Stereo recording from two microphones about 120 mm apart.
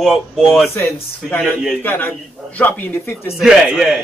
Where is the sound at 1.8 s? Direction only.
20° left (ahead or behind).